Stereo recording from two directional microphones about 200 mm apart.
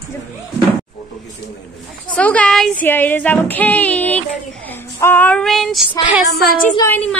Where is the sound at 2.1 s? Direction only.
5° left (ahead or behind).